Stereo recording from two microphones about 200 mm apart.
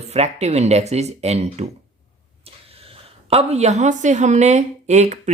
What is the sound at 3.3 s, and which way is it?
A woman's voice, 35° right (ahead or behind).